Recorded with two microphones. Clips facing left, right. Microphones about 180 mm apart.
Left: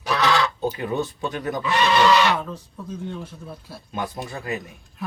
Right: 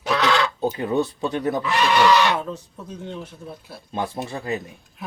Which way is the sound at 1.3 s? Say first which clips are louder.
Right 4 dB; 30° right (ahead or behind).